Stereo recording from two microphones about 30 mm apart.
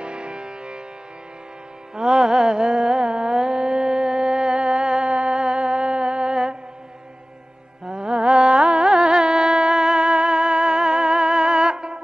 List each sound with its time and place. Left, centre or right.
0.0 s music: right
2.0 s carnatic music: right
3.3 s music: right
7.8 s music: right
8.5 s carnatic music: right
8.7 s music: centre